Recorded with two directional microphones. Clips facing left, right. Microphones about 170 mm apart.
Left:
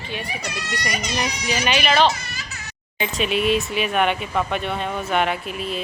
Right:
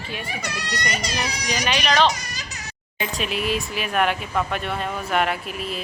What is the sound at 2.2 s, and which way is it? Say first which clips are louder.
Baby cry: even; 40° right (ahead or behind).